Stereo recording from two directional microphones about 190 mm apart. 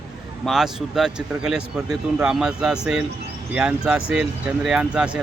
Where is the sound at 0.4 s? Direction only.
Centre (ahead or behind).